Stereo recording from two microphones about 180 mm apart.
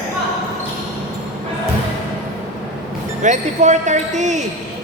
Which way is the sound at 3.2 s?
40° right (ahead or behind).